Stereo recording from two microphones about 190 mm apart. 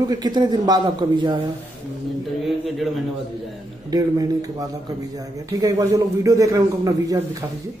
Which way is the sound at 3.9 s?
20° right (ahead or behind).